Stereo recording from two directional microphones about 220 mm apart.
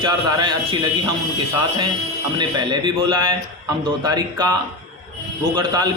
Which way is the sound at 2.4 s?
20° right (ahead or behind).